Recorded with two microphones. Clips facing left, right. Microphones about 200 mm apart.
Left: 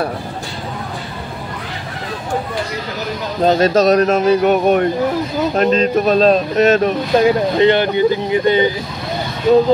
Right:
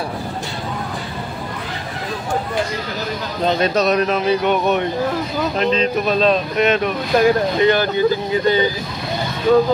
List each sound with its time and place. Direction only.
3.4 s speech: 45° left (ahead or behind)
7.2 s speech: 25° left (ahead or behind)